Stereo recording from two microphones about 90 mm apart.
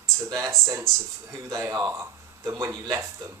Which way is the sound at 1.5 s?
40° right (ahead or behind).